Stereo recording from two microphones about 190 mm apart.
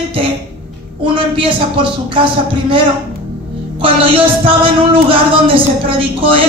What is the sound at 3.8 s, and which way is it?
Speech, 30° right (ahead or behind).